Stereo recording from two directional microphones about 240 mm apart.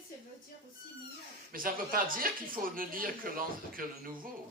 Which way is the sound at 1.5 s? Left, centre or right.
Right.